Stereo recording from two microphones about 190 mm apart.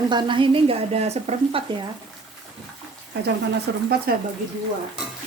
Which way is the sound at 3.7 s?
65° right (ahead or behind).